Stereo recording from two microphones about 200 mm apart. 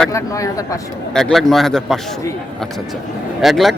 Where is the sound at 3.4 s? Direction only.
Centre (ahead or behind).